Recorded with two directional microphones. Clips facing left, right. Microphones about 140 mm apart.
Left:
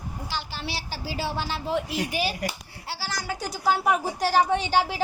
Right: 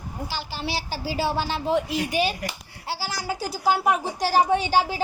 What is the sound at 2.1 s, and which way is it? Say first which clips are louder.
Speech: right 4 dB; 10° left (ahead or behind).